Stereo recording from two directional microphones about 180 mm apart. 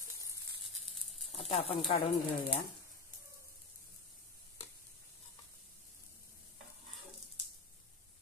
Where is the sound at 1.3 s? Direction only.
35° left (ahead or behind).